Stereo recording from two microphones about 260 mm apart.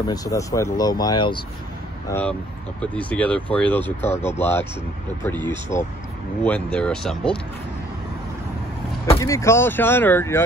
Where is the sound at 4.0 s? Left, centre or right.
Left.